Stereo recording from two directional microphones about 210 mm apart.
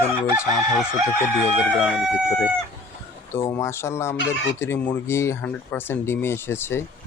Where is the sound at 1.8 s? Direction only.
Centre (ahead or behind).